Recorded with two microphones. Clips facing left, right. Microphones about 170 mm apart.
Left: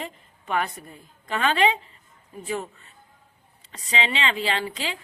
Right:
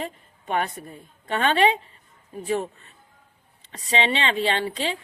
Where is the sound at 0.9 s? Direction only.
35° right (ahead or behind).